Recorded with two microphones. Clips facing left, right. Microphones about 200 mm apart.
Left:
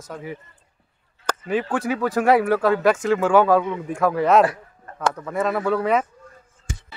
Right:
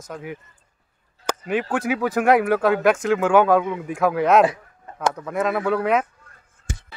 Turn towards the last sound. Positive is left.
turn(degrees=-5)  # may be behind; listen again after turning